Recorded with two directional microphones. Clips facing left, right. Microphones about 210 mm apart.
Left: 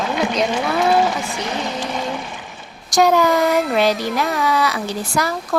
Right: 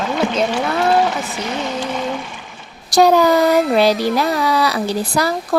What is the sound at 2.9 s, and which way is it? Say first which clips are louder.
Speech: right 3 dB; 35° right (ahead or behind).